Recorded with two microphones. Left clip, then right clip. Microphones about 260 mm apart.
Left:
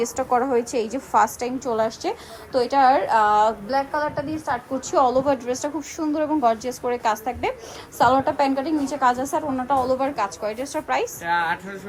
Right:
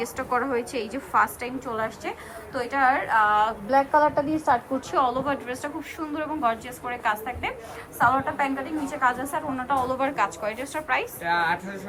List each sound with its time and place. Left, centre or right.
0.0 s a woman's voice: centre
3.7 s a woman's voice: centre
4.7 s a woman's voice: centre
11.2 s a woman's voice: centre